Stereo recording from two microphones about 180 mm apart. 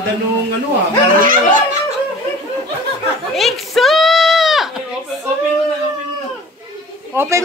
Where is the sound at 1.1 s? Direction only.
50° right (ahead or behind).